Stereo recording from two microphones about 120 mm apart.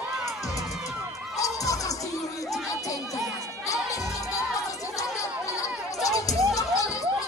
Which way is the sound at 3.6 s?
25° left (ahead or behind).